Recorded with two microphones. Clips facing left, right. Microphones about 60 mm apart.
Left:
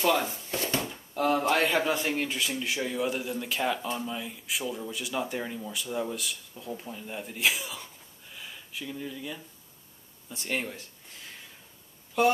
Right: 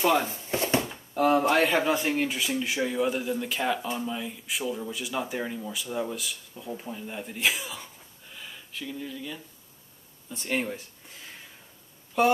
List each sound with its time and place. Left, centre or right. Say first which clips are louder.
0.0 s speech: right 2 dB; centre
0.4 s a sound: right 4 dB; right
1.1 s speech: right 3 dB; centre
10.3 s speech: right 3 dB; centre